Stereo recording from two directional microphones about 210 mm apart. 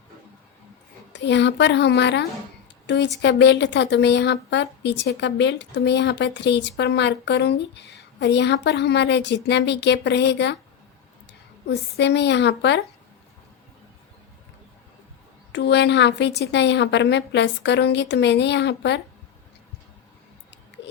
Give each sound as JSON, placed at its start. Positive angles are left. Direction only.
{"t": 1.2, "sound": "a woman's voice", "side_deg": 55}
{"t": 11.7, "sound": "a woman's voice", "side_deg": 55}
{"t": 15.5, "sound": "a woman's voice", "side_deg": 55}